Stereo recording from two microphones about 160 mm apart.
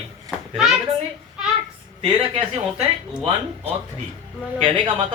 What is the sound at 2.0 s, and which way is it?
Speech, 40° right (ahead or behind).